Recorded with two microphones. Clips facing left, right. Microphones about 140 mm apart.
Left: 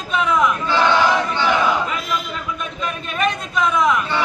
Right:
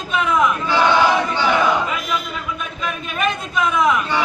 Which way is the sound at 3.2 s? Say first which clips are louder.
Left 1 dB; 5° right (ahead or behind).